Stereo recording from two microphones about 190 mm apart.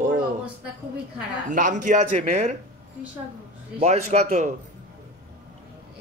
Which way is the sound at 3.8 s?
35° right (ahead or behind).